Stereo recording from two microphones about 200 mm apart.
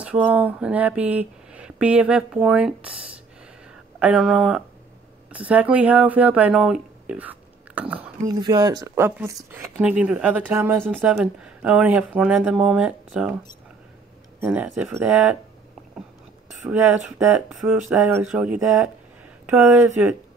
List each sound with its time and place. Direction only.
0.0 s speech: 5° right (ahead or behind)
4.0 s speech: centre (ahead or behind)
8.3 s speech: 20° right (ahead or behind)
14.4 s speech: 5° right (ahead or behind)
16.6 s speech: 10° right (ahead or behind)